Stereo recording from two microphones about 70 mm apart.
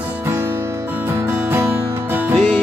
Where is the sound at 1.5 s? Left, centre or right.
Right.